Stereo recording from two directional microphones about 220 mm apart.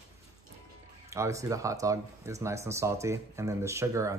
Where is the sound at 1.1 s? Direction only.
15° right (ahead or behind).